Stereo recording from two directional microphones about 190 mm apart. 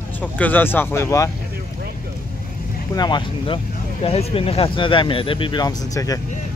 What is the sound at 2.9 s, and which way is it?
Speech, 20° left (ahead or behind).